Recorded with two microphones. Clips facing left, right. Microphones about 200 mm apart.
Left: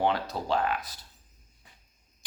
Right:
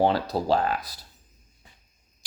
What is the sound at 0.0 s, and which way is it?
Speech, 35° right (ahead or behind).